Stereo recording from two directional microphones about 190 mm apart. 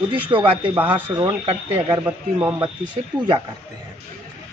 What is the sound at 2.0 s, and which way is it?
Speech, 10° right (ahead or behind).